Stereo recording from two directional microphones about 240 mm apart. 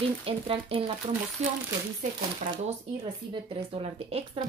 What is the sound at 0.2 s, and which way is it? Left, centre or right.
Speech, right.